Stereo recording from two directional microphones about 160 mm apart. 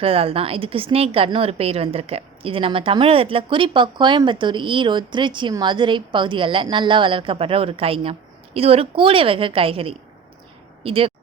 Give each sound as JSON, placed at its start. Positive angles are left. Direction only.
{"t": 0.0, "sound": "a woman's voice", "side_deg": -35}